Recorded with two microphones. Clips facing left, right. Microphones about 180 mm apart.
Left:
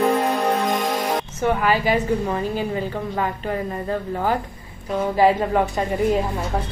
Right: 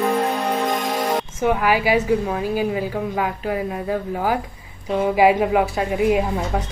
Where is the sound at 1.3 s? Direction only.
10° right (ahead or behind).